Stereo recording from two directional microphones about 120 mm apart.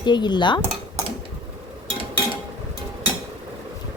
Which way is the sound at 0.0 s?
40° left (ahead or behind).